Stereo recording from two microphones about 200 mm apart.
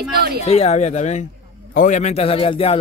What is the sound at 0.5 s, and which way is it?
A man's voice, 30° left (ahead or behind).